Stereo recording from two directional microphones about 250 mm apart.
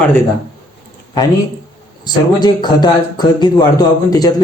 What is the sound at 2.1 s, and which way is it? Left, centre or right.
A man's voice, centre.